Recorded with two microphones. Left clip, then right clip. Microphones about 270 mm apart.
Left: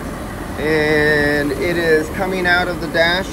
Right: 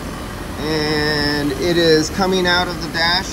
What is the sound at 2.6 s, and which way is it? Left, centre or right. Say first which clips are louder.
Speech: left 3 dB; centre.